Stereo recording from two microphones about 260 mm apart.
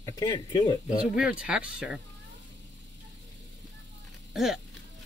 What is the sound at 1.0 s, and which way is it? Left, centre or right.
Speech, centre.